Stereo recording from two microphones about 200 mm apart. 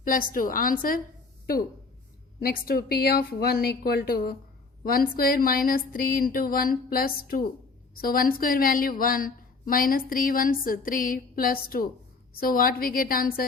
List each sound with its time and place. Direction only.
0.0 s speech: 45° left (ahead or behind)
2.4 s speech: 45° left (ahead or behind)